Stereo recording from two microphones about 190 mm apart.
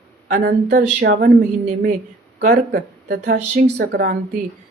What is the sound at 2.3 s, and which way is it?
Speech, 65° right (ahead or behind).